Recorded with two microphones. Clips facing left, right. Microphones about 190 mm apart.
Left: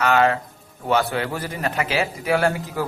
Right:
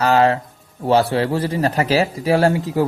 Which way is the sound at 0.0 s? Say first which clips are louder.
Right 3 dB; 30° right (ahead or behind).